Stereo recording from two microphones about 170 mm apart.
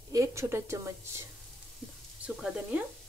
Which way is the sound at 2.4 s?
5° right (ahead or behind).